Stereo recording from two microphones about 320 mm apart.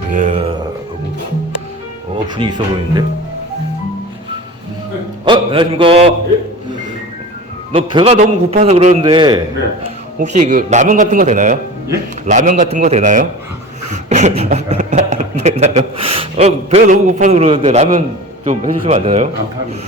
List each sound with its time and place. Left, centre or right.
0.1 s speech: right
2.2 s a man's voice: centre
5.2 s a sound: centre
7.7 s a man's voice: centre